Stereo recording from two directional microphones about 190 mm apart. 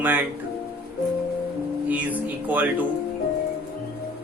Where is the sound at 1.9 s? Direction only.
10° right (ahead or behind).